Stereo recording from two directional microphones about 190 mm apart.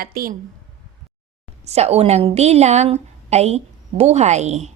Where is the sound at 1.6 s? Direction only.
35° right (ahead or behind).